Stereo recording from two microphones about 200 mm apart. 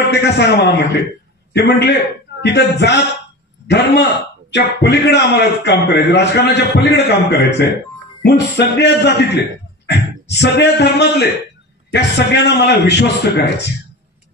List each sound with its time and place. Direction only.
0.1 s a man's voice: 60° left (ahead or behind)